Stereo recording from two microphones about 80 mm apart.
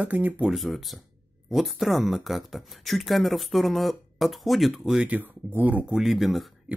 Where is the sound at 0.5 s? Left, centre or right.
Centre.